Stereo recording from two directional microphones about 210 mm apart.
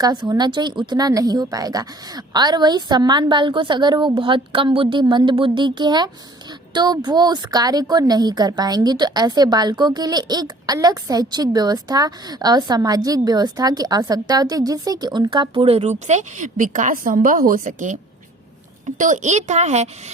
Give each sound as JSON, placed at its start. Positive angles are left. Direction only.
{"t": 0.0, "sound": "a woman's voice", "side_deg": -20}